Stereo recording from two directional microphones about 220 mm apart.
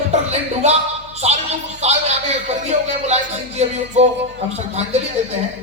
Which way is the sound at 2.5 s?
30° right (ahead or behind).